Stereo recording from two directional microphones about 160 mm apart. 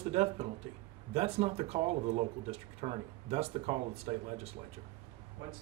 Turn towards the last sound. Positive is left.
turn(degrees=-40)  # may be behind; listen again after turning